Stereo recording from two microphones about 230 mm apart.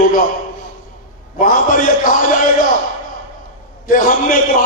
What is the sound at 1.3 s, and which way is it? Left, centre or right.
A man's voice, left.